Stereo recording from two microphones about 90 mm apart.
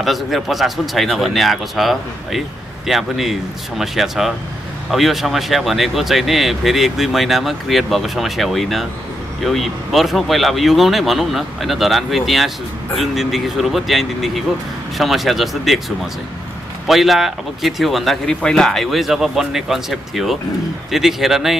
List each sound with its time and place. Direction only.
0.0 s speech: centre (ahead or behind)
16.8 s speech: centre (ahead or behind)